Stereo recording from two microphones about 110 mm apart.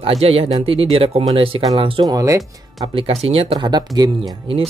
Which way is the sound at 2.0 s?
30° right (ahead or behind).